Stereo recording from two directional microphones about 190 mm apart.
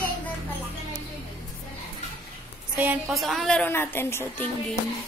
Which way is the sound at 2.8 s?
5° right (ahead or behind).